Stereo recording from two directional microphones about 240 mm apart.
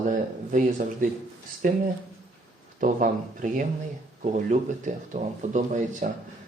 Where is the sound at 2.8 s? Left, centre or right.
Right.